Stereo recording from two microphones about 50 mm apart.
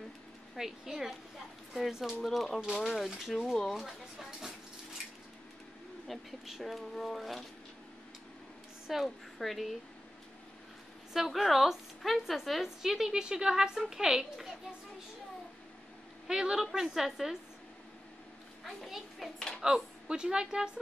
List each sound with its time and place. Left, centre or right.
0.6 s a woman's voice: centre
6.0 s speech: centre
8.8 s a woman's voice: centre
11.1 s a woman's voice: centre
16.3 s a woman's voice: centre
18.6 s a child's voice: centre
19.6 s a woman's voice: centre